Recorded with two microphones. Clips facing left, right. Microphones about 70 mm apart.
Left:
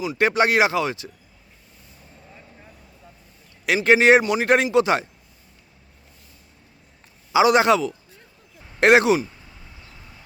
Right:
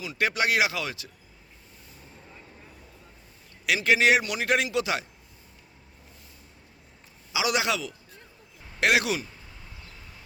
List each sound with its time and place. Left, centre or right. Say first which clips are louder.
0.2 s speech: left 6 dB; left
3.8 s speech: left 7 dB; left
7.3 s speech: left 11 dB; left